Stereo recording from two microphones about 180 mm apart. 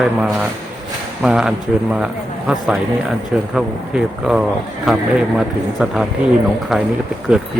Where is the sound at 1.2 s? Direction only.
5° right (ahead or behind).